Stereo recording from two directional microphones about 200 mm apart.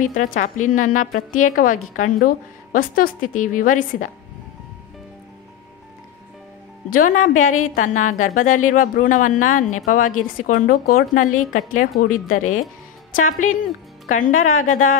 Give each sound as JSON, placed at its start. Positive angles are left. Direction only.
{"t": 0.1, "sound": "a woman's voice", "side_deg": 40}
{"t": 6.9, "sound": "a woman's voice", "side_deg": 40}